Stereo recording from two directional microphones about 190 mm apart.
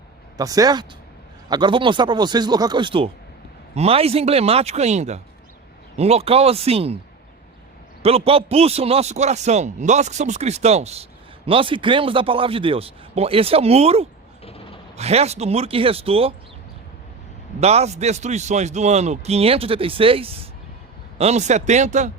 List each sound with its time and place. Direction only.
0.3 s a man's voice: 20° right (ahead or behind)
8.0 s a man's voice: 30° right (ahead or behind)
14.4 s a sound: 30° left (ahead or behind)
14.9 s a man's voice: 35° right (ahead or behind)
17.6 s a man's voice: 35° right (ahead or behind)